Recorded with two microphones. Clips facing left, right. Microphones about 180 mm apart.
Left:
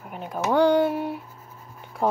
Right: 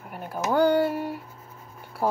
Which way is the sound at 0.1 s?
5° right (ahead or behind).